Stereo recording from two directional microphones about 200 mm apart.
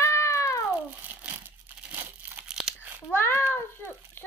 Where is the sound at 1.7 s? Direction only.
10° right (ahead or behind).